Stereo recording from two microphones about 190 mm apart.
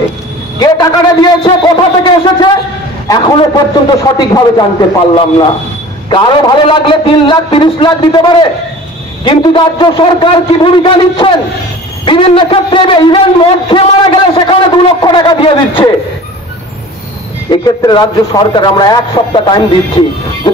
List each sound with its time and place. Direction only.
0.6 s a man's voice: 20° left (ahead or behind)
4.0 s a man's voice: 20° left (ahead or behind)
17.5 s a man's voice: 20° left (ahead or behind)